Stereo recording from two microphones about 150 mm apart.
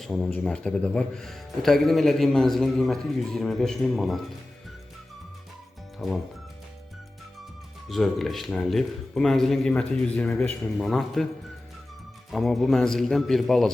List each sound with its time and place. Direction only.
0.0 s speech: 5° left (ahead or behind)
6.0 s speech: centre (ahead or behind)
7.9 s speech: centre (ahead or behind)
12.3 s speech: centre (ahead or behind)